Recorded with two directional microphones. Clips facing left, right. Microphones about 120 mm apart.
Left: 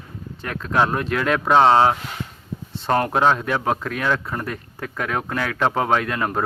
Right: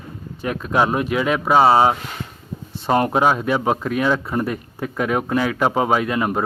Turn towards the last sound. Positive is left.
turn(degrees=-5)  # may be behind; listen again after turning